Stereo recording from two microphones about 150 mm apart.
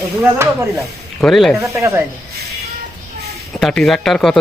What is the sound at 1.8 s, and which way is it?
Speech, 20° right (ahead or behind).